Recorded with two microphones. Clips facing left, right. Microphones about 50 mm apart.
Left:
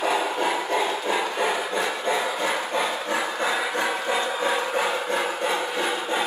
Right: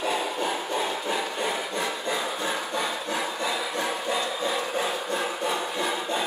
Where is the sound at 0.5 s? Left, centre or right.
Left.